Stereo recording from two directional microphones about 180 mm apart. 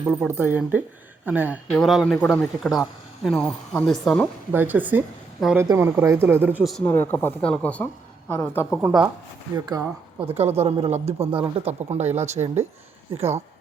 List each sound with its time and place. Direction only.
0.3 s speech: 10° right (ahead or behind)
1.7 s speech: centre (ahead or behind)
4.5 s a woman's voice: 10° right (ahead or behind)
6.8 s speech: 10° left (ahead or behind)
8.8 s speech: 5° right (ahead or behind)
9.6 s a woman's voice: 20° right (ahead or behind)
10.3 s speech: 35° right (ahead or behind)